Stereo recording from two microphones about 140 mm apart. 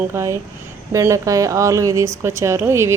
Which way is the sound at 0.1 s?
20° right (ahead or behind).